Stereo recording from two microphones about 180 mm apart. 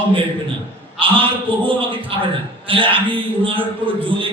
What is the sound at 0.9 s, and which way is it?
A man's voice, 30° right (ahead or behind).